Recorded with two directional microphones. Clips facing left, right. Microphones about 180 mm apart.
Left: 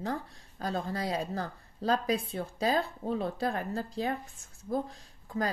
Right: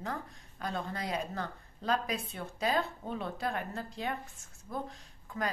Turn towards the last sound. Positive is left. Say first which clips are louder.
# left 4 dB
turn(degrees=35)  # may be behind; listen again after turning